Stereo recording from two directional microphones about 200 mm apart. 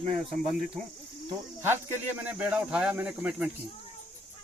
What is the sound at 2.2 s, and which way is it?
Cricket, 5° right (ahead or behind).